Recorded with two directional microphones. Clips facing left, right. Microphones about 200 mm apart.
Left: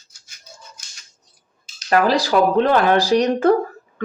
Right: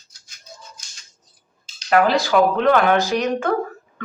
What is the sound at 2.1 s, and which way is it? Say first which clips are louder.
Speech: left 1 dB; 35° left (ahead or behind).